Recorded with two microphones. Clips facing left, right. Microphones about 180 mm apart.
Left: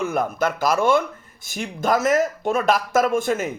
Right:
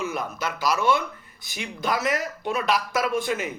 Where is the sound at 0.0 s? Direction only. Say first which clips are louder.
Left 7 dB; 50° left (ahead or behind).